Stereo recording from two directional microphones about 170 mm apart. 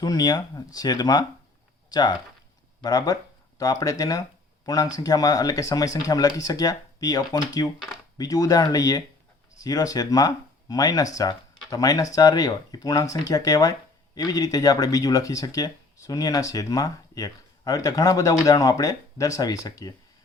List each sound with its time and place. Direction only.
0.0 s speech: 25° left (ahead or behind)